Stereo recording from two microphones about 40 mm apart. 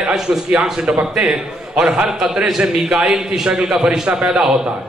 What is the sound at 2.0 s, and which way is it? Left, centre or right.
A man's voice, centre.